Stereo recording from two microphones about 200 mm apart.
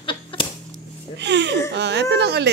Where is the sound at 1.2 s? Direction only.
60° right (ahead or behind).